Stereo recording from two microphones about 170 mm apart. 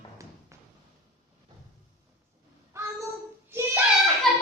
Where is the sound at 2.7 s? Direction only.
15° right (ahead or behind).